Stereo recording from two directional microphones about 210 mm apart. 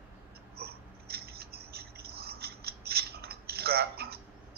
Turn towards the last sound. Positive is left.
turn(degrees=-50)  # may be behind; listen again after turning